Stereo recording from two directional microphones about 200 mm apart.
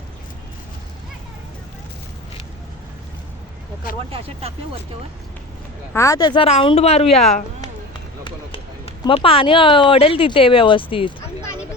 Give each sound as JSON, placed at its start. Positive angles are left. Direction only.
{"t": 4.1, "sound": "speech", "side_deg": -30}
{"t": 5.9, "sound": "speech", "side_deg": 15}
{"t": 9.0, "sound": "speech", "side_deg": 30}